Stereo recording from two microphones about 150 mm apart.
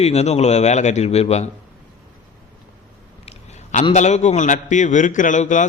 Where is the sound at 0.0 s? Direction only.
45° left (ahead or behind).